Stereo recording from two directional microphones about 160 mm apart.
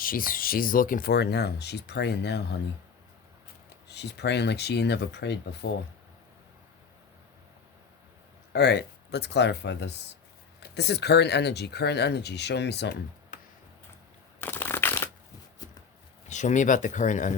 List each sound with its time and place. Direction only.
0.0 s speech: 60° left (ahead or behind); by 2.6 s 90° left
3.8 s speech: 90° left
8.5 s speech: 90° left
13.3 s tick-tock: 50° left (ahead or behind)
14.4 s crushing: 15° left (ahead or behind)
16.3 s speech: 50° left (ahead or behind)